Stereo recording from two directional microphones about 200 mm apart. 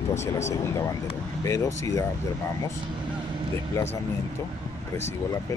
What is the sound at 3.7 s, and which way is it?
Speech, 10° left (ahead or behind).